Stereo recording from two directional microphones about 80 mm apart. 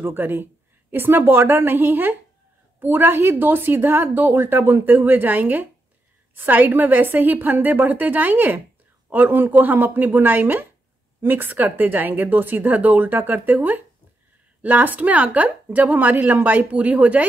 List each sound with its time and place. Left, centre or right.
0.0 s a woman's voice: right